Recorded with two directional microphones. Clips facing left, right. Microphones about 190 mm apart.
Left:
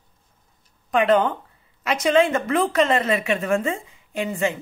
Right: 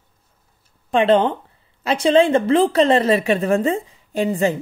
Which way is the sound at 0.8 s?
30° right (ahead or behind).